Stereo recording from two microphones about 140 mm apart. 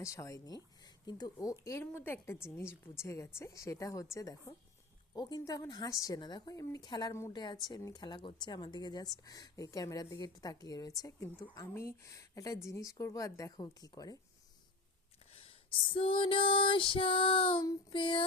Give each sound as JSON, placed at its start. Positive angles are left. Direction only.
{"t": 0.0, "sound": "a woman's voice", "side_deg": 20}
{"t": 15.3, "sound": "female singing", "side_deg": 40}
{"t": 17.6, "sound": "a woman's voice", "side_deg": 25}
{"t": 18.0, "sound": "a sound", "side_deg": 35}